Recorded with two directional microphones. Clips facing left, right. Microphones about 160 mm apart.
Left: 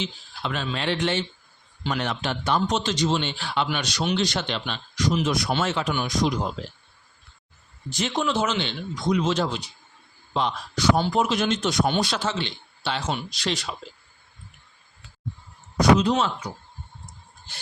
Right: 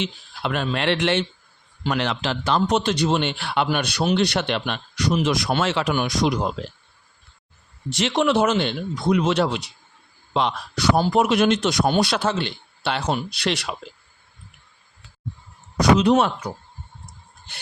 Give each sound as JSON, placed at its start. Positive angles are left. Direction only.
{"t": 0.0, "sound": "speech", "side_deg": -60}
{"t": 2.0, "sound": "a man's voice", "side_deg": -90}
{"t": 5.2, "sound": "speech", "side_deg": -90}
{"t": 5.6, "sound": "speech", "side_deg": -75}
{"t": 7.9, "sound": "a man's voice", "side_deg": -85}
{"t": 12.0, "sound": "a man's voice", "side_deg": -60}
{"t": 15.8, "sound": "a man's voice", "side_deg": -75}